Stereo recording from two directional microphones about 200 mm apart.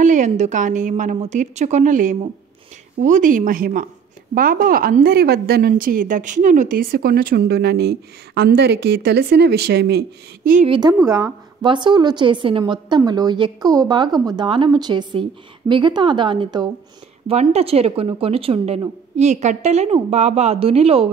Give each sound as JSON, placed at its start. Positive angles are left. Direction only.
{"t": 0.0, "sound": "a woman's voice", "side_deg": -40}
{"t": 10.7, "sound": "a woman's voice", "side_deg": -20}
{"t": 17.3, "sound": "a woman's voice", "side_deg": -30}